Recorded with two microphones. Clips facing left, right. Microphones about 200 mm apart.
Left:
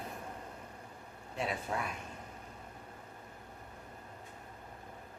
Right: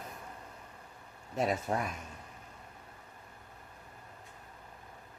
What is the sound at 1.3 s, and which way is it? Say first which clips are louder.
Speech: right 5 dB; 40° right (ahead or behind).